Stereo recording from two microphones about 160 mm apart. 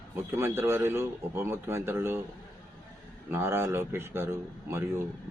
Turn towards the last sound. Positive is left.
turn(degrees=-15)  # may be behind; listen again after turning